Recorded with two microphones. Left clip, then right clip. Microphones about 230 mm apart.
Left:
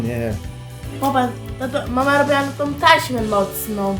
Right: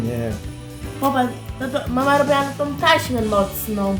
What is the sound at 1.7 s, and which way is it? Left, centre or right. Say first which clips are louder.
A woman's voice: left 1 dB; centre.